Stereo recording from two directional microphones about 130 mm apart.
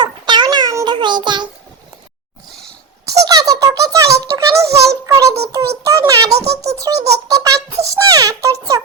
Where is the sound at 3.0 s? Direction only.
25° right (ahead or behind).